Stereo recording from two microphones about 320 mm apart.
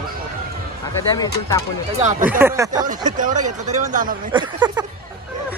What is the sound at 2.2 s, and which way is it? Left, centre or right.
Speech, centre.